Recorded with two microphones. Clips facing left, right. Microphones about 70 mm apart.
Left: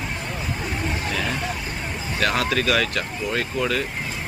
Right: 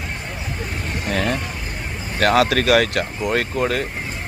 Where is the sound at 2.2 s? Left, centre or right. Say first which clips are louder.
Right 6 dB; right.